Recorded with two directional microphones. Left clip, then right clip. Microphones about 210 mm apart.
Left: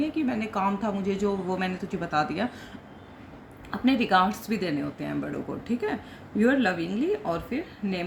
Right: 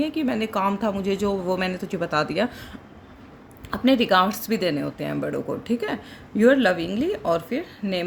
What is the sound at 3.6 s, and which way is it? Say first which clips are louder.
A woman's voice: right 5 dB; 55° right (ahead or behind).